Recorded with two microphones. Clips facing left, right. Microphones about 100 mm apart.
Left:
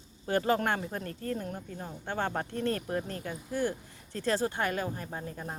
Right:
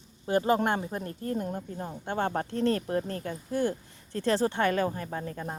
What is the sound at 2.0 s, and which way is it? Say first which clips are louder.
Speech: right 3 dB; 45° right (ahead or behind).